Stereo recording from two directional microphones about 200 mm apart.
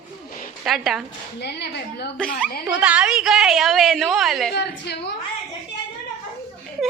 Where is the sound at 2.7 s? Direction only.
5° right (ahead or behind).